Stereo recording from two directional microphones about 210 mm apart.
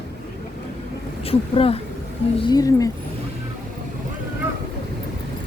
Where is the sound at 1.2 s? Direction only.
25° left (ahead or behind).